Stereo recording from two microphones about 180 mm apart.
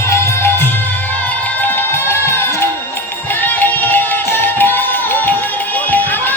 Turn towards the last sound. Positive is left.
turn(degrees=10)  # may be behind; listen again after turning